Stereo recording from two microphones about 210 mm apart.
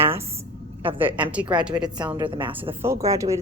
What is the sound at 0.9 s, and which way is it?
Speech, 10° right (ahead or behind).